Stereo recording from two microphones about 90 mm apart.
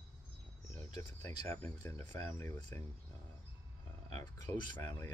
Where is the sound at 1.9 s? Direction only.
30° left (ahead or behind).